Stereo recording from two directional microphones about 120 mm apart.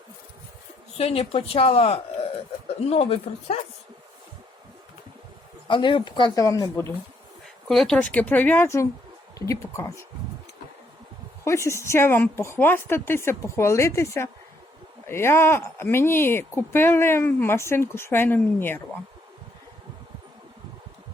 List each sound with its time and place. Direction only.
0.9 s speech: 55° left (ahead or behind)
5.6 s speech: 40° left (ahead or behind)
6.4 s speech: 25° left (ahead or behind)
7.7 s speech: 5° left (ahead or behind); by 10.1 s 20° left (ahead or behind)
11.4 s speech: 25° left (ahead or behind)